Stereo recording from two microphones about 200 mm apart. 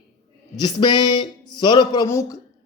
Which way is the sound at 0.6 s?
20° left (ahead or behind).